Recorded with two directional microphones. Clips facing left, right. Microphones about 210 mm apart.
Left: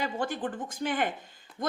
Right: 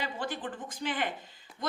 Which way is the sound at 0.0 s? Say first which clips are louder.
Left 4 dB; 45° left (ahead or behind).